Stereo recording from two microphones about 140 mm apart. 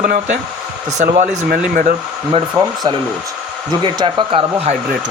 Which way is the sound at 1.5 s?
90° right.